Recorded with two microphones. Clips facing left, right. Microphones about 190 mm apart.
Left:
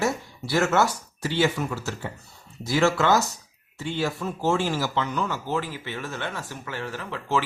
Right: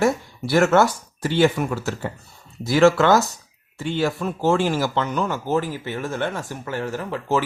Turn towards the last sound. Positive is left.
turn(degrees=-45)  # may be behind; listen again after turning